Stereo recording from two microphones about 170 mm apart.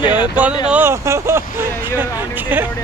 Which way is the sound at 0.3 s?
10° right (ahead or behind).